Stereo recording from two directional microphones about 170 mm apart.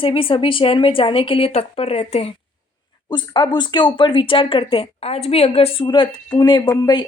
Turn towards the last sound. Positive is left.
turn(degrees=25)  # may be behind; listen again after turning